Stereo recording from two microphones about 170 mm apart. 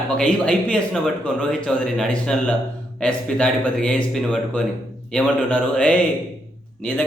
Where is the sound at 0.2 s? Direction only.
5° left (ahead or behind).